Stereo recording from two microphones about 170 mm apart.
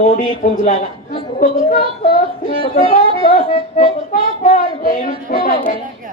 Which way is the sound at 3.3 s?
50° left (ahead or behind).